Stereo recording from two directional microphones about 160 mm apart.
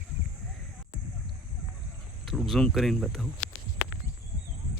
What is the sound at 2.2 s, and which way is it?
Speech, centre (ahead or behind).